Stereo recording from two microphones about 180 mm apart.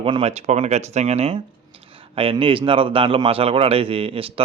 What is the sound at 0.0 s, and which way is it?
Speech, 30° right (ahead or behind).